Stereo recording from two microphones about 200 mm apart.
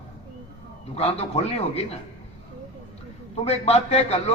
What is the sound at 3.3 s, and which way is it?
Speech, 30° left (ahead or behind).